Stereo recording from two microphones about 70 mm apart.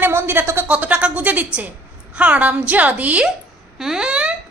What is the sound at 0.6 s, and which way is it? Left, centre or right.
A woman's voice, centre.